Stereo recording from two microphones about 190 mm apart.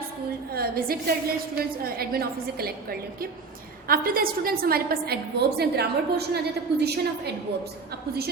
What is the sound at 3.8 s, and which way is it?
A woman's voice, 50° right (ahead or behind).